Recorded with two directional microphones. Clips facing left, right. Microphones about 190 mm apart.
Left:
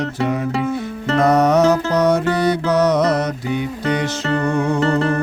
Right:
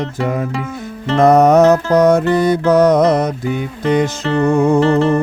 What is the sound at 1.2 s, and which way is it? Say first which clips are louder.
Music: right 5 dB; 50° right (ahead or behind).